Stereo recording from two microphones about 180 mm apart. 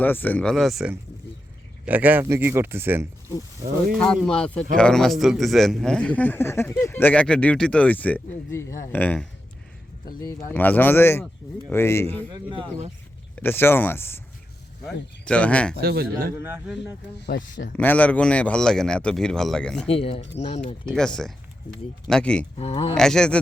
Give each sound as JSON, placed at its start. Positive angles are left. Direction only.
{"t": 0.0, "sound": "a man's voice", "side_deg": 10}
{"t": 3.9, "sound": "a man's voice", "side_deg": 5}
{"t": 10.5, "sound": "a man's voice", "side_deg": 10}
{"t": 12.3, "sound": "speech", "side_deg": -25}
{"t": 13.3, "sound": "a man's voice", "side_deg": 10}
{"t": 15.2, "sound": "a man's voice", "side_deg": 5}
{"t": 15.8, "sound": "speech", "side_deg": -60}
{"t": 17.7, "sound": "speech", "side_deg": 10}
{"t": 19.9, "sound": "speech", "side_deg": 30}
{"t": 20.8, "sound": "speech", "side_deg": 5}
{"t": 22.5, "sound": "speech", "side_deg": 35}
{"t": 23.0, "sound": "speech", "side_deg": 5}